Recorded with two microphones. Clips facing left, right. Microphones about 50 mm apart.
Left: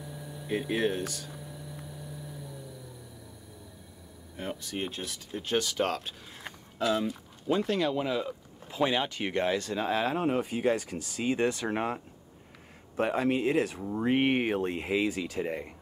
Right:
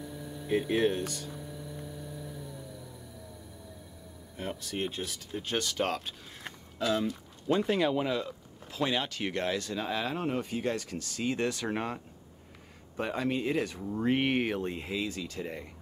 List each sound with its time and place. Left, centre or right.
0.0 s hum: centre
4.4 s speech: centre
7.6 s speech: centre
8.1 s speech: centre
12.9 s speech: centre